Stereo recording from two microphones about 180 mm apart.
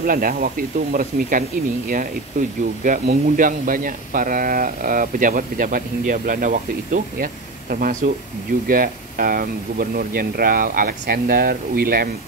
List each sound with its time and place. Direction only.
0.0 s speech: 50° right (ahead or behind)
2.8 s speech: 50° right (ahead or behind)